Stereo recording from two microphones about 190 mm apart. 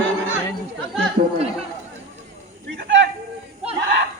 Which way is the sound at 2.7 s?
75° right (ahead or behind).